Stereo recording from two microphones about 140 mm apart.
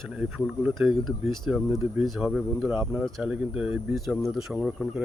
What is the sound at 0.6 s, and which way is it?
Speech, 5° right (ahead or behind).